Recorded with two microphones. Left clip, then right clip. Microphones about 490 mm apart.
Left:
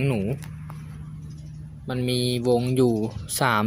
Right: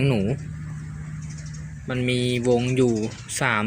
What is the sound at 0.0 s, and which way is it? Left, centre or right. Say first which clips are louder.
Speech: right 3 dB; left.